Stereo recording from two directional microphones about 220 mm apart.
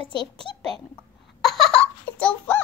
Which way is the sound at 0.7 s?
Centre (ahead or behind).